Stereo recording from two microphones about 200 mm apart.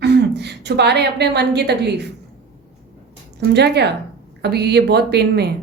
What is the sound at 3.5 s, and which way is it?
A woman's voice, 55° right (ahead or behind).